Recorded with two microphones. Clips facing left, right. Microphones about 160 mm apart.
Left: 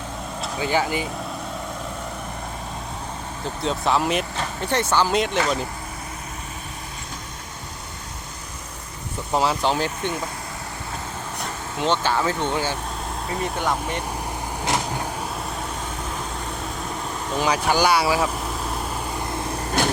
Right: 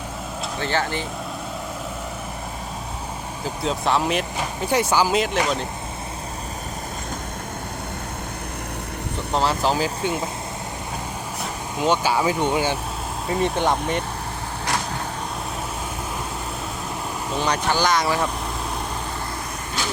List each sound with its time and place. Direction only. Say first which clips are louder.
0.6 s speech: left 2 dB; 10° left (ahead or behind)
3.4 s speech: even; centre (ahead or behind)
4.4 s speech: right 2 dB; 10° right (ahead or behind)
9.3 s speech: even; centre (ahead or behind)
11.8 s speech: right 2 dB; 10° right (ahead or behind)
13.4 s speech: right 4 dB; 25° right (ahead or behind)
17.3 s speech: left 2 dB; 5° left (ahead or behind)
19.8 s vehicle: left 6 dB; 50° left (ahead or behind)